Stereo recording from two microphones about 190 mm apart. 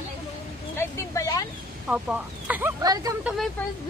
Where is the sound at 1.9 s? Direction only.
10° right (ahead or behind).